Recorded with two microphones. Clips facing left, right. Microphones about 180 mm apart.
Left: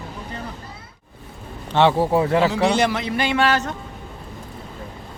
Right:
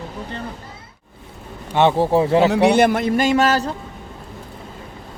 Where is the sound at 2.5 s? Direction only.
60° right (ahead or behind); by 3.8 s 35° right (ahead or behind).